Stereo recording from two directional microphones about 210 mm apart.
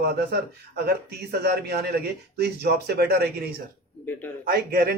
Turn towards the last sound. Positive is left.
turn(degrees=-45)  # may be behind; listen again after turning